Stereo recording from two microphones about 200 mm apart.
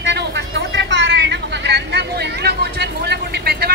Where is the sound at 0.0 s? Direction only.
60° right (ahead or behind).